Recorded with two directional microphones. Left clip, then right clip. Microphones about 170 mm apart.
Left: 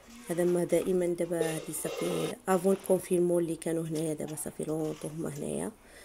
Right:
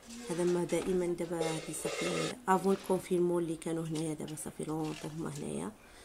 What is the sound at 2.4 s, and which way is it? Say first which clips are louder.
A woman's voice: left 3 dB; 15° left (ahead or behind).